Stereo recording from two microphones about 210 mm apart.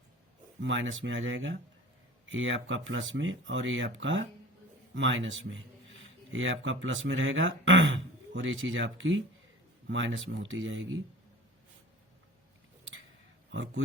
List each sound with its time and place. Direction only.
0.6 s a man's voice: 60° right (ahead or behind)
13.5 s speech: 65° right (ahead or behind)